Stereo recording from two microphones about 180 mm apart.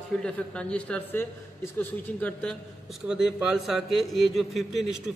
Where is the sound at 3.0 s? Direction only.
5° right (ahead or behind).